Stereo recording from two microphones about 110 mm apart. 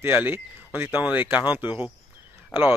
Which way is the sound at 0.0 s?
20° right (ahead or behind).